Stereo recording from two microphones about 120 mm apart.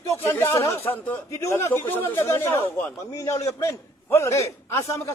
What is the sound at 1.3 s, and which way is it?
A man's voice, 25° left (ahead or behind).